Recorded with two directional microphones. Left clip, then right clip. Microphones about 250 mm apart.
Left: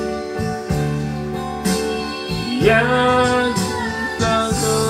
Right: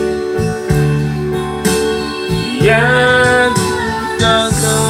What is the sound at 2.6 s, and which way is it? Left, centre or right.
Music, right.